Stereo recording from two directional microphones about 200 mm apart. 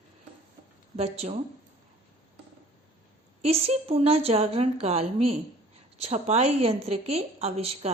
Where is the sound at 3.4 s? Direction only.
30° right (ahead or behind).